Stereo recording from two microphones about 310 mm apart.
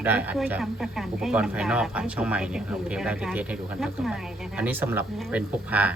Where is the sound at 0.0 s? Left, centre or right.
Centre.